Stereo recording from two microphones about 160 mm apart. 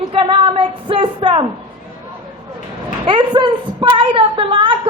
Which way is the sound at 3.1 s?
30° right (ahead or behind).